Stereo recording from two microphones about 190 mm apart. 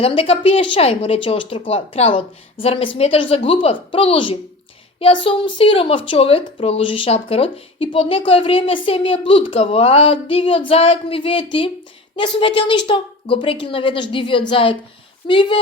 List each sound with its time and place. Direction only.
0.0 s speech: 30° left (ahead or behind)